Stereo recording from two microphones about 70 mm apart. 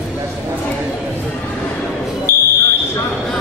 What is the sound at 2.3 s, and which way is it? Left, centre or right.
Fire alarm, left.